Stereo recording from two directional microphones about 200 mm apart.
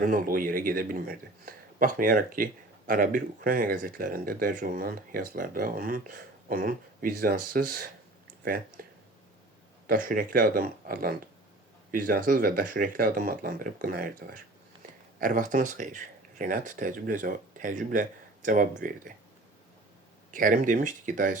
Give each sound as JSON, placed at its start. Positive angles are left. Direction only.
{"t": 0.0, "sound": "speech", "side_deg": -45}
{"t": 20.3, "sound": "speech", "side_deg": -40}